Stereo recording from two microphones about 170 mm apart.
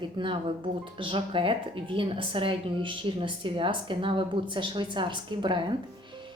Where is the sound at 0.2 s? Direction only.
25° right (ahead or behind).